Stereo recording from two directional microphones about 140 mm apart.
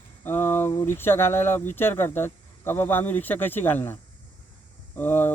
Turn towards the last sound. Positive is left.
turn(degrees=15)  # may be behind; listen again after turning